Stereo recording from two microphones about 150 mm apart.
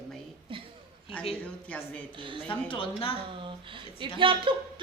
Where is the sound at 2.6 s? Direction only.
35° left (ahead or behind).